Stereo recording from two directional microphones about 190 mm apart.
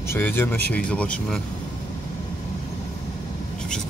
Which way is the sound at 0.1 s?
10° left (ahead or behind).